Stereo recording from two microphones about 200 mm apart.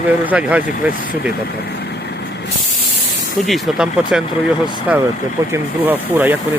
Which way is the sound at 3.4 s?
Centre (ahead or behind).